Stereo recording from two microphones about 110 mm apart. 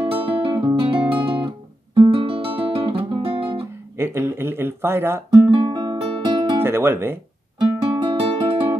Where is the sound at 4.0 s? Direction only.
20° right (ahead or behind).